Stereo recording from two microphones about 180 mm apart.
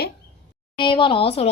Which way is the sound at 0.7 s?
30° left (ahead or behind).